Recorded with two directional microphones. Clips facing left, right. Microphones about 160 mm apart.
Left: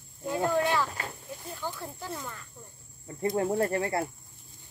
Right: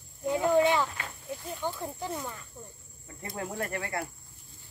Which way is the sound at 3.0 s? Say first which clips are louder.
Left 10 dB; 25° left (ahead or behind).